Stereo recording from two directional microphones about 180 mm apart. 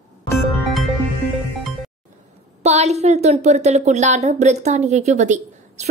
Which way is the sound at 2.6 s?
40° right (ahead or behind).